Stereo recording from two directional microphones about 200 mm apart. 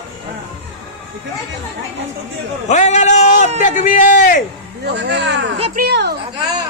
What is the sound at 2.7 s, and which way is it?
A man's voice, 35° left (ahead or behind).